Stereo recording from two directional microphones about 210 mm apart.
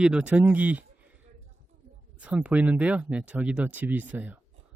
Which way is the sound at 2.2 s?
5° right (ahead or behind).